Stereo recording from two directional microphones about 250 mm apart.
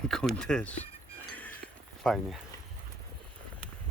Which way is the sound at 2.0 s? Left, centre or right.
Centre.